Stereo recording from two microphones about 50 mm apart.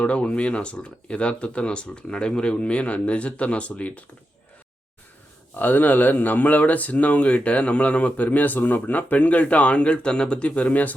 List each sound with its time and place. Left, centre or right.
0.0 s speech: left
5.5 s speech: left